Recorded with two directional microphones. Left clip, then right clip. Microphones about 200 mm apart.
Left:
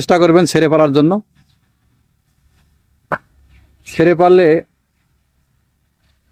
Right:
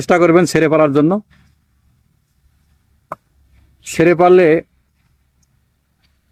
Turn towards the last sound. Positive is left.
turn(degrees=-5)  # may be behind; listen again after turning